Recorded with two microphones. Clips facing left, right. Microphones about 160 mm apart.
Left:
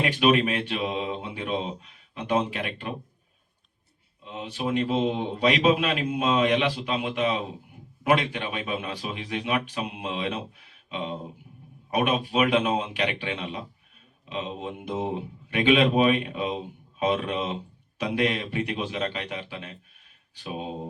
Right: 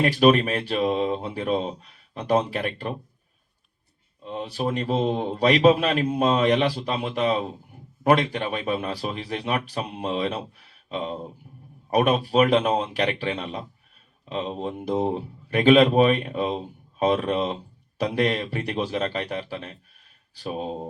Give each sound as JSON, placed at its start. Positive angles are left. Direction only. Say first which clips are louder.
{"t": 0.0, "sound": "a man's voice", "louder": "right 4 dB", "side_deg": -40}
{"t": 4.2, "sound": "a man's voice", "louder": "right 4 dB", "side_deg": -40}